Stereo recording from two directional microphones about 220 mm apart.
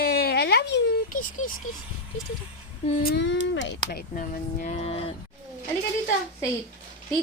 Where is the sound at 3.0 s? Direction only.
50° left (ahead or behind); by 5.1 s 25° left (ahead or behind).